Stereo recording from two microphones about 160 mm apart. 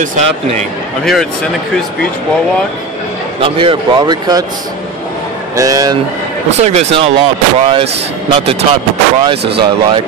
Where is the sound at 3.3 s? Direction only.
35° right (ahead or behind).